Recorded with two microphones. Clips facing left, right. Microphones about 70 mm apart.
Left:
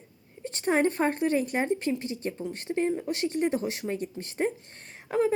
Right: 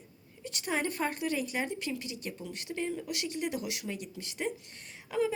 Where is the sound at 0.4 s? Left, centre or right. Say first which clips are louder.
Left 8 dB; left.